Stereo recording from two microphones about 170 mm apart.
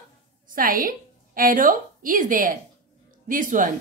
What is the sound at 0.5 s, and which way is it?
A woman's voice, 55° right (ahead or behind).